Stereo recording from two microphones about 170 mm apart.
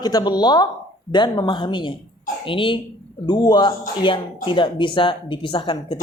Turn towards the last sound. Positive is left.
turn(degrees=30)  # may be behind; listen again after turning